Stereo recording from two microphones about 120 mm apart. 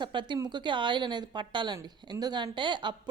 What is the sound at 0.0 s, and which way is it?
A woman's voice, 40° right (ahead or behind).